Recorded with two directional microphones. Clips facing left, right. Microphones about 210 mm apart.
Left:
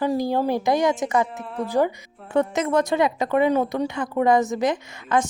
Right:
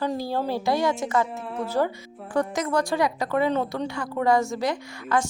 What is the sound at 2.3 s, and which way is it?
A woman's voice, 25° left (ahead or behind).